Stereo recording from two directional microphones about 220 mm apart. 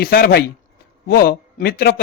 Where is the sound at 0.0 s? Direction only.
45° left (ahead or behind).